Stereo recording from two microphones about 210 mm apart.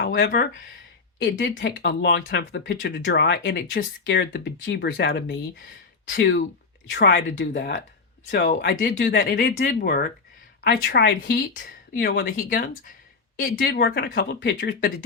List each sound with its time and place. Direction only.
0.0 s speech: 45° left (ahead or behind)
1.2 s speech: 60° left (ahead or behind); by 8.9 s 45° left (ahead or behind)
8.9 s speech: 55° left (ahead or behind)